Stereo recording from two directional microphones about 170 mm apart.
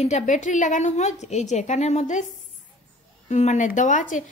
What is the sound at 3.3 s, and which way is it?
Speech, 45° left (ahead or behind).